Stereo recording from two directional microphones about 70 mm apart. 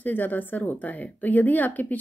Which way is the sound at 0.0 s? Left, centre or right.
Left.